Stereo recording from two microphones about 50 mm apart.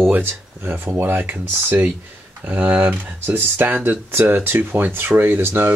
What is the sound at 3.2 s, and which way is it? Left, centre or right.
Speech, right.